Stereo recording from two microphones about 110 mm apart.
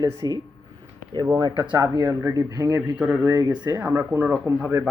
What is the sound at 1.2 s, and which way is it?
Speech, 30° right (ahead or behind).